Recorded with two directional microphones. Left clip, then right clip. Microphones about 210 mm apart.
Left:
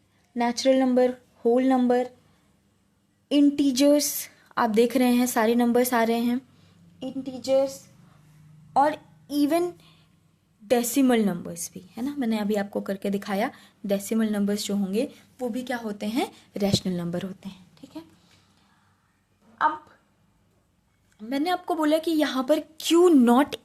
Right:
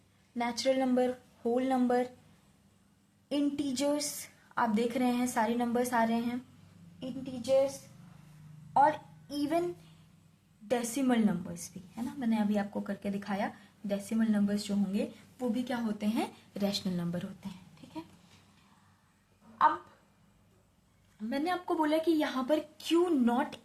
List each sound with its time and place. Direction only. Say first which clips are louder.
0.3 s speech: left 8 dB; 35° left (ahead or behind)
3.2 s speech: left 11 dB; 40° left (ahead or behind)
8.7 s a woman's voice: left 4 dB; 45° left (ahead or behind)
10.7 s speech: left 9 dB; 45° left (ahead or behind)
17.8 s a sound: left 6 dB; 50° left (ahead or behind)
21.2 s speech: left 6 dB; 50° left (ahead or behind)